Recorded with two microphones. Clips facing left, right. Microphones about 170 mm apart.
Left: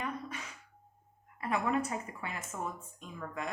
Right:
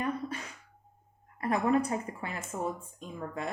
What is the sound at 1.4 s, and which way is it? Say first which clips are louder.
Speech: right 5 dB; 35° right (ahead or behind).